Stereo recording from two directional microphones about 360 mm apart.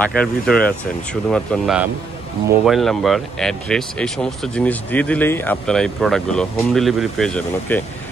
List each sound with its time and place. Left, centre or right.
0.0 s speech: centre